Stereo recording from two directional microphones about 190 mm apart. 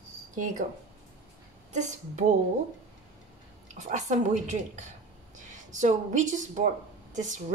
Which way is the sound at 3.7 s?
40° right (ahead or behind).